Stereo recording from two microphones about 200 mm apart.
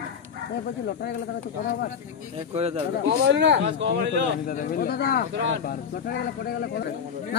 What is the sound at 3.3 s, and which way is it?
Speech, 60° right (ahead or behind).